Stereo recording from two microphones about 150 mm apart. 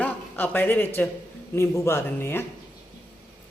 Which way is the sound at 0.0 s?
10° left (ahead or behind).